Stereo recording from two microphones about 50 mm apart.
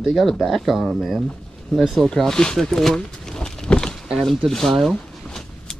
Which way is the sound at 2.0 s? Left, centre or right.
Centre.